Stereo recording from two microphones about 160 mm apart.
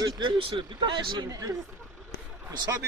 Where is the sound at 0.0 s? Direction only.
30° right (ahead or behind).